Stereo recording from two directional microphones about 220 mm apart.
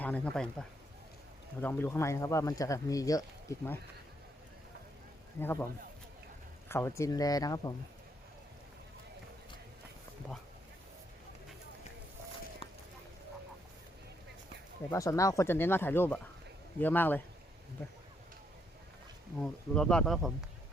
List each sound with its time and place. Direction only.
0.0 s speech: 5° left (ahead or behind)
1.6 s speech: 10° left (ahead or behind)
5.4 s speech: 10° left (ahead or behind)
6.7 s speech: 10° left (ahead or behind)
14.8 s speech: 15° left (ahead or behind)
19.4 s speech: 5° left (ahead or behind)